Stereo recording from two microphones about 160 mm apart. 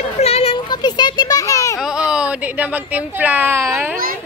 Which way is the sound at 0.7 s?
25° left (ahead or behind).